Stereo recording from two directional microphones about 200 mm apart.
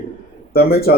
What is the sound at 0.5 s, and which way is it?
Speech, 50° left (ahead or behind).